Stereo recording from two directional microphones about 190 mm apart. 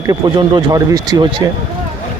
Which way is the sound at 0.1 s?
20° right (ahead or behind).